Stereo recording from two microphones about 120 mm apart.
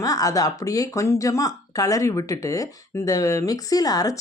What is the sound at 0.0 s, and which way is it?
Speech, 30° left (ahead or behind).